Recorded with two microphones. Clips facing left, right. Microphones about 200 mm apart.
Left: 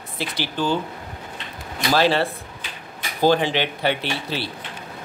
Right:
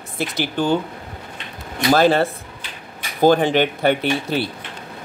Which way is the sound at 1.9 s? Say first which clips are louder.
Right 4 dB; 45° right (ahead or behind).